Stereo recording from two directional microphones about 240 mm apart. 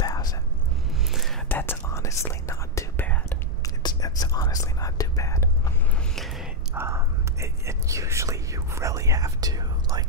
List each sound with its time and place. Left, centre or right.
0.0 s whispering: centre
1.1 s whispering: centre
6.1 s whispering: centre